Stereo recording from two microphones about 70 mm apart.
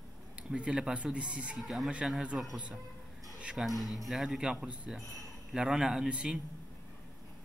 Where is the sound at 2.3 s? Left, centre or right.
Centre.